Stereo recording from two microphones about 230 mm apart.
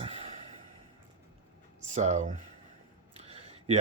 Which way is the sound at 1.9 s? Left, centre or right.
Right.